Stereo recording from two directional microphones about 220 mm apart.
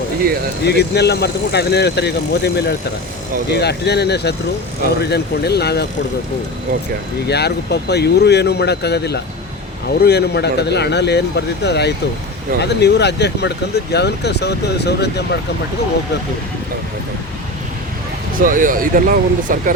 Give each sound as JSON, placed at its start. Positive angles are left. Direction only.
{"t": 0.2, "sound": "speech", "side_deg": -45}
{"t": 0.6, "sound": "speech", "side_deg": 50}
{"t": 7.3, "sound": "speech", "side_deg": 50}
{"t": 18.3, "sound": "speech", "side_deg": -40}